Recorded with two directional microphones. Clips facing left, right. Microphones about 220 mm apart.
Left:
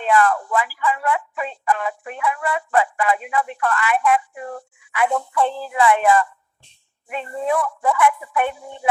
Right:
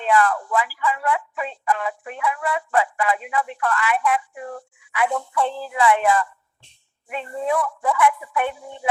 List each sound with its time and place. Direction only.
0.0 s speech: 50° left (ahead or behind)